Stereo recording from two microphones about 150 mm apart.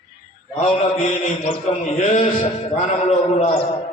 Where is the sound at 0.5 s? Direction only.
50° left (ahead or behind).